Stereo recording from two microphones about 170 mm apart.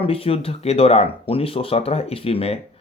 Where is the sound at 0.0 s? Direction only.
35° left (ahead or behind).